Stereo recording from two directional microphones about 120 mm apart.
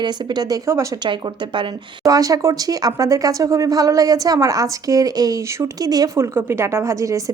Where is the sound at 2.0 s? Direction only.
30° right (ahead or behind).